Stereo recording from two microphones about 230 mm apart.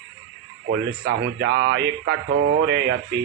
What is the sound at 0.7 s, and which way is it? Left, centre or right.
A man's voice, right.